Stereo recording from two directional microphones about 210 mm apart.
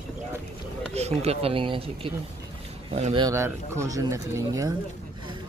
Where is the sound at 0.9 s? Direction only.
30° right (ahead or behind).